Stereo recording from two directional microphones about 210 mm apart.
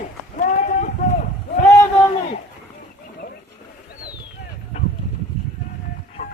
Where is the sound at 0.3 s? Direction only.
35° left (ahead or behind).